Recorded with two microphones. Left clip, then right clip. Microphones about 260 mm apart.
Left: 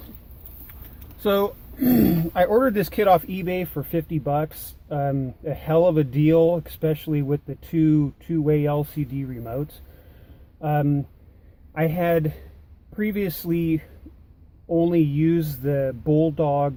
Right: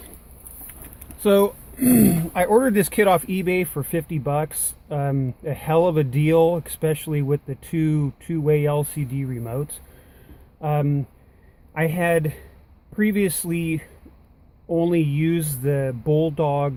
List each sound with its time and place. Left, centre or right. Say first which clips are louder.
1.2 s speech: right 4 dB; right